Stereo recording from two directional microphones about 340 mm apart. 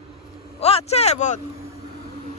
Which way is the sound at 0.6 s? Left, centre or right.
Centre.